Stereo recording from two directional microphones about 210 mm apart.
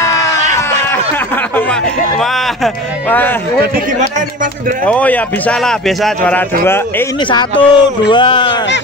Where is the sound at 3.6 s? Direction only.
40° right (ahead or behind).